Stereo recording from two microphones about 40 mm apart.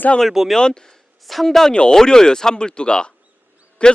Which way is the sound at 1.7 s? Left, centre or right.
Left.